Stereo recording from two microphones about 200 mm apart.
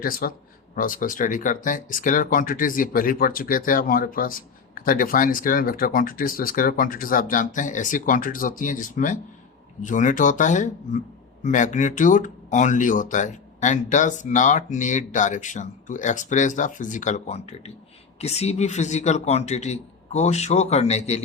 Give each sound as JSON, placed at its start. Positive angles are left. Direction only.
{"t": 0.0, "sound": "speech", "side_deg": 50}